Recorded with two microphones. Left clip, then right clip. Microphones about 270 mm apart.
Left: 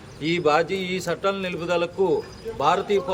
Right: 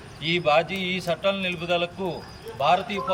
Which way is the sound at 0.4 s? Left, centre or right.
Centre.